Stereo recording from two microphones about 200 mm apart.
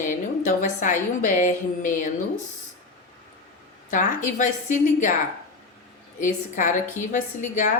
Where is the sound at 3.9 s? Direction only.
40° left (ahead or behind).